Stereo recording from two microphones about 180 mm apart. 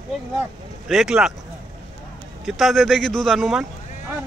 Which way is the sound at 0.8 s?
5° right (ahead or behind).